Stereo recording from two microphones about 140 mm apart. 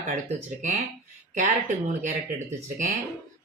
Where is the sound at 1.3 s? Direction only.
60° right (ahead or behind).